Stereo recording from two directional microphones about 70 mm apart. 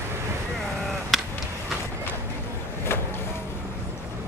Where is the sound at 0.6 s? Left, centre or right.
Centre.